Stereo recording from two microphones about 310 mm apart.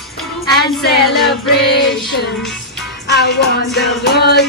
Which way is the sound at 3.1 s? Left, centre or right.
Left.